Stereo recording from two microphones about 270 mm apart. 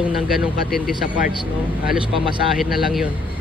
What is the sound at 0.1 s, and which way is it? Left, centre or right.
Speech, centre.